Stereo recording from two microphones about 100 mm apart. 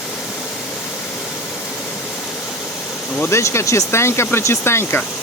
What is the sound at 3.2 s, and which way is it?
Speech, 30° left (ahead or behind).